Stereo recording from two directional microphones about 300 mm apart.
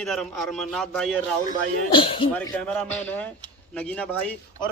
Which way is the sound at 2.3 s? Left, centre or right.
Centre.